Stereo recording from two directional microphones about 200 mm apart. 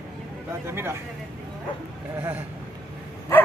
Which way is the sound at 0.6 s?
10° right (ahead or behind).